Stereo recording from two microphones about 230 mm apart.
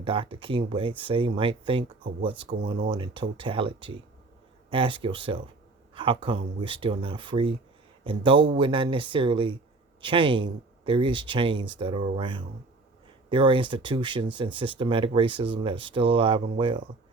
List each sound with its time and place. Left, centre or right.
0.0 s speech: right
2.9 s speech: right